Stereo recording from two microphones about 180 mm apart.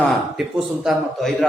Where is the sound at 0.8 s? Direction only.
Centre (ahead or behind).